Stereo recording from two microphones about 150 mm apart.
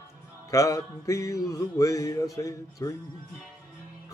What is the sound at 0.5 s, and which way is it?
Music, 20° left (ahead or behind).